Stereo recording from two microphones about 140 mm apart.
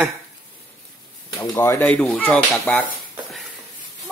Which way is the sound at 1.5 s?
15° left (ahead or behind).